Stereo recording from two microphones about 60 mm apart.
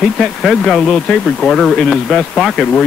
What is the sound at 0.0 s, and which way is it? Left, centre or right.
Speech, centre.